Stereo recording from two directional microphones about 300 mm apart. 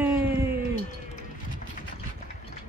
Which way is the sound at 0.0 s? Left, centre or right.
Centre.